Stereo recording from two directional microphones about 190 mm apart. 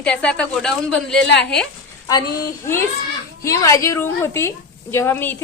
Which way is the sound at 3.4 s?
15° left (ahead or behind).